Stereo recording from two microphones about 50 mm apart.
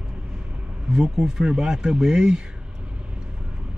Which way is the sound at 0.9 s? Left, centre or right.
Centre.